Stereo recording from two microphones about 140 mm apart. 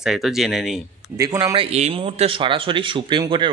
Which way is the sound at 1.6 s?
50° right (ahead or behind).